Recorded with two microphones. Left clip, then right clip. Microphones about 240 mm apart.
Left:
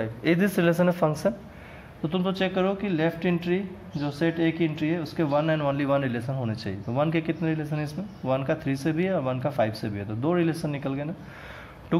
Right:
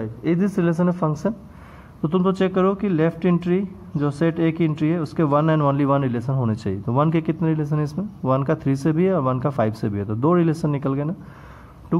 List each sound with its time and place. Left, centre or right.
0.0 s a man's voice: centre